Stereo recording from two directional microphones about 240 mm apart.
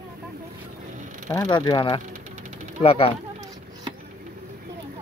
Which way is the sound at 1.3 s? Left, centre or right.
Centre.